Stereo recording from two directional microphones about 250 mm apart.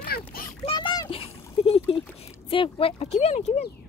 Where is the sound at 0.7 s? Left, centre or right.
Centre.